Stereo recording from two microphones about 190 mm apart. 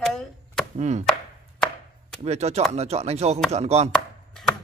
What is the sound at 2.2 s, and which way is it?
Speech, 35° right (ahead or behind).